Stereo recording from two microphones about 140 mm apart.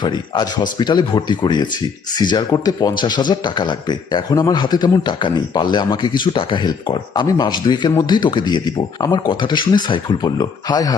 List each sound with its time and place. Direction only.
0.0 s a man's voice: 30° left (ahead or behind)